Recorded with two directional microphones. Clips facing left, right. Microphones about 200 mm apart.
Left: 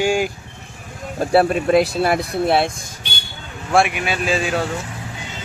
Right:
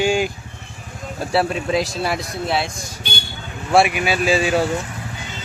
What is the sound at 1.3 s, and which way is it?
Speech, 55° left (ahead or behind).